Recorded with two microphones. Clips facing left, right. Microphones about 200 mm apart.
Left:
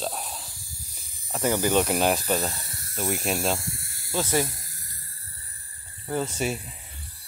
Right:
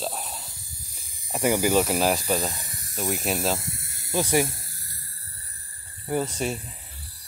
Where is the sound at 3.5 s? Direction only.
20° right (ahead or behind).